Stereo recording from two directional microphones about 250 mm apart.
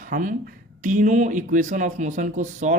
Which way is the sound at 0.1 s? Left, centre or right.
Right.